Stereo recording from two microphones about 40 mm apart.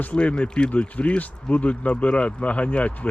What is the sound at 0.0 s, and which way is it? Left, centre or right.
Speech, left.